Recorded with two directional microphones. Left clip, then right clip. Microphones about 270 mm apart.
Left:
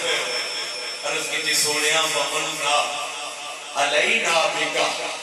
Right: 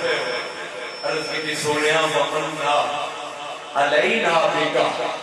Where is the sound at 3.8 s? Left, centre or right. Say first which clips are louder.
Right 2 dB; right.